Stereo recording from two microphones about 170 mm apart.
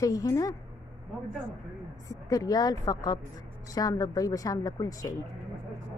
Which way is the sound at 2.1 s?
20° left (ahead or behind).